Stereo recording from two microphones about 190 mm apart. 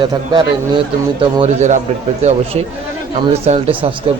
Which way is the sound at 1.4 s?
35° right (ahead or behind).